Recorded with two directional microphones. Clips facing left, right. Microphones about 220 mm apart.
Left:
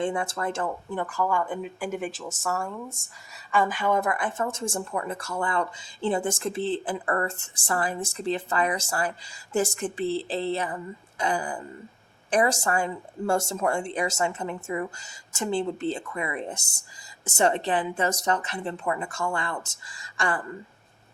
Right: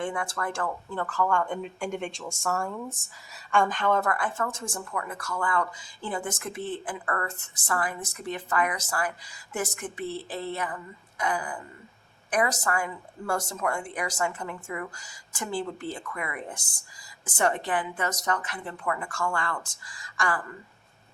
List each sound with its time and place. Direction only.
0.0 s speech: 25° left (ahead or behind)